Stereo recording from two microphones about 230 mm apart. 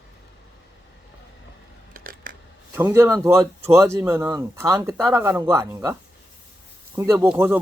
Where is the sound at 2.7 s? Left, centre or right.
Centre.